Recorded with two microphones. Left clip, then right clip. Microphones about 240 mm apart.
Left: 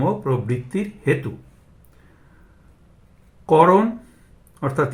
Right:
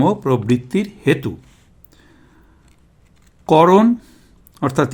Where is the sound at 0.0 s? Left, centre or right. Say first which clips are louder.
Right 5 dB; right.